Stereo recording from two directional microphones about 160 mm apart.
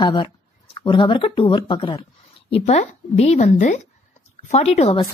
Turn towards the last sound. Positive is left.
turn(degrees=40)  # may be behind; listen again after turning